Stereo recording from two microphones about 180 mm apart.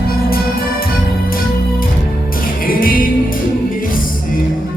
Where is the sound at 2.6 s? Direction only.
50° left (ahead or behind).